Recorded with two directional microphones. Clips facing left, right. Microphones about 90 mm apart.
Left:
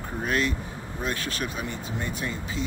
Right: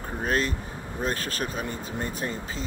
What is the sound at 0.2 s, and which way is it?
Speech, 40° right (ahead or behind).